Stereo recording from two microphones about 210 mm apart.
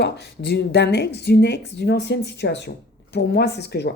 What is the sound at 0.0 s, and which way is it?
Speech, 50° left (ahead or behind).